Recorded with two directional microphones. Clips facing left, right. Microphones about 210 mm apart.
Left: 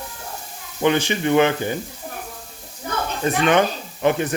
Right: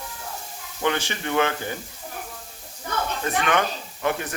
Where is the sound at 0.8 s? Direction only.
20° left (ahead or behind).